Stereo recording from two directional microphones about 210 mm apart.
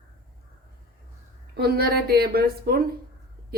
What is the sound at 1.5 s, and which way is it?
A woman's voice, 50° right (ahead or behind).